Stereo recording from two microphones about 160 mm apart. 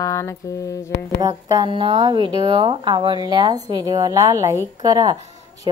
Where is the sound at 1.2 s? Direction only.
25° right (ahead or behind).